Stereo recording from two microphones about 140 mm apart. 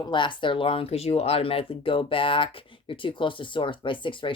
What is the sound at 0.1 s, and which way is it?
Speech, 35° left (ahead or behind).